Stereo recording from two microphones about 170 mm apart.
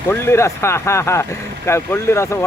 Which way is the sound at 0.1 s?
15° left (ahead or behind).